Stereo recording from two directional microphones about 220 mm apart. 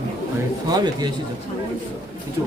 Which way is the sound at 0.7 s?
20° right (ahead or behind).